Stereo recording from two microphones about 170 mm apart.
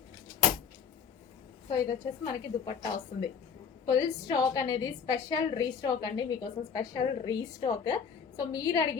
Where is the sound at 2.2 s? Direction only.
30° left (ahead or behind).